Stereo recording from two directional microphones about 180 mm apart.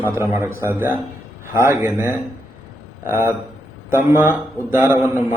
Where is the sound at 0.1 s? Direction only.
10° right (ahead or behind).